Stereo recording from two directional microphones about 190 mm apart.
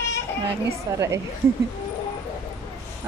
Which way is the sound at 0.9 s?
15° right (ahead or behind).